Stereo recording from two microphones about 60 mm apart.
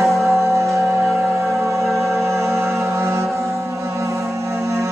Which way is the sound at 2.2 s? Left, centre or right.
Right.